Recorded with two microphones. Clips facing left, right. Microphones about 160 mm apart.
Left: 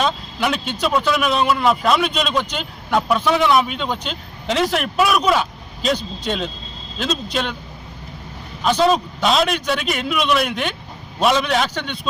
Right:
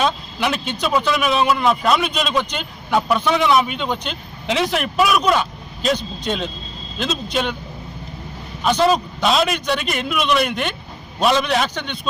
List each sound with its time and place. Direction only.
0.0 s a man's voice: centre (ahead or behind)
8.6 s a man's voice: centre (ahead or behind)